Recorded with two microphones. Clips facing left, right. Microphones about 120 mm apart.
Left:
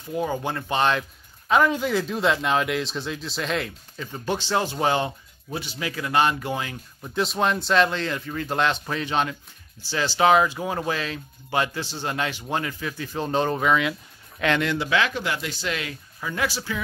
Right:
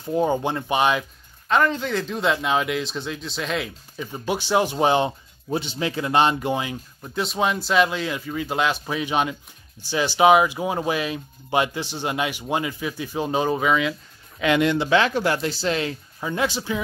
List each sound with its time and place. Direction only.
0.1 s speech: 25° right (ahead or behind); by 1.0 s 10° right (ahead or behind)
1.5 s speech: 5° left (ahead or behind)
4.0 s speech: 15° right (ahead or behind)
7.0 s speech: centre (ahead or behind)
14.6 s speech: 25° right (ahead or behind)